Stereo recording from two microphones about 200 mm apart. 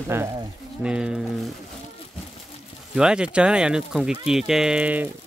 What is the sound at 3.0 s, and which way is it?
Speech, 5° right (ahead or behind).